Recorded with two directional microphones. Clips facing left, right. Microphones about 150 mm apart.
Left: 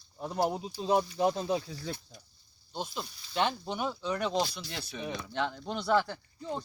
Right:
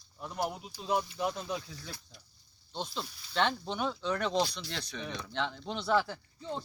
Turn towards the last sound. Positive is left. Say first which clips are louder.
# left 1 dB
turn(degrees=0)  # may be behind; listen again after turning